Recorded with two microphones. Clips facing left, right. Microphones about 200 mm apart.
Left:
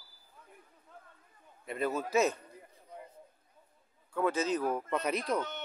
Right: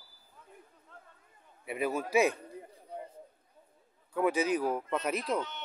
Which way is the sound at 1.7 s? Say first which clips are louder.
Right 1 dB; 10° right (ahead or behind).